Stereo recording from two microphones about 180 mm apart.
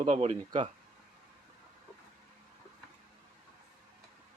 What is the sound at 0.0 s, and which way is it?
Speech, 35° right (ahead or behind).